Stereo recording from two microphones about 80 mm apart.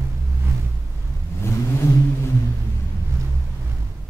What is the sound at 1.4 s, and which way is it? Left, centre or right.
Vehicle, left.